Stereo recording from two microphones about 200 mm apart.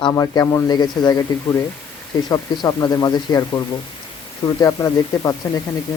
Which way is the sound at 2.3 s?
20° left (ahead or behind).